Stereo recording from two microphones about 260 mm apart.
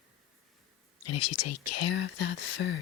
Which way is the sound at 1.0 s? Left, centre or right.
Left.